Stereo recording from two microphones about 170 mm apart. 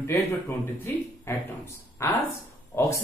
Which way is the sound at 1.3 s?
15° left (ahead or behind).